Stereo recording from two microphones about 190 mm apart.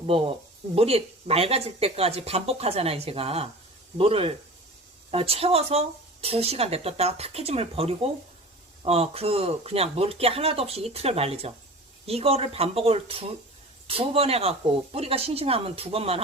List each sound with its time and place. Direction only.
0.0 s a man's voice: 30° right (ahead or behind)